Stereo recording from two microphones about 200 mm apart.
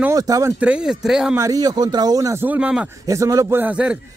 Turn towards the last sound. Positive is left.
turn(degrees=-5)  # may be behind; listen again after turning